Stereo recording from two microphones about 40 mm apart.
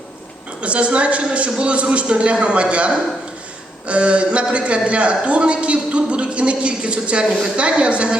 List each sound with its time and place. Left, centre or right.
0.6 s a woman's voice: right